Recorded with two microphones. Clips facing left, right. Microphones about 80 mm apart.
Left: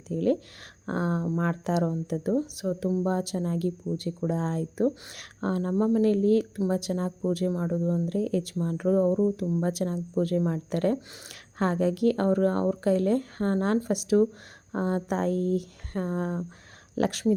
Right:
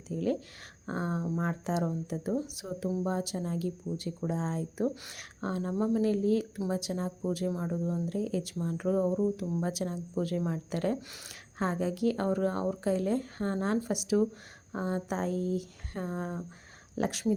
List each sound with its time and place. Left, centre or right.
0.1 s a woman's voice: left
8.0 s a woman's voice: left